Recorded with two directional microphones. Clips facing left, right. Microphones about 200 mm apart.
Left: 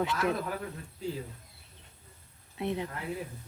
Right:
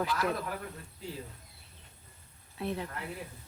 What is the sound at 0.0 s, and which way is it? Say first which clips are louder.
Speech: left 2 dB; 25° left (ahead or behind).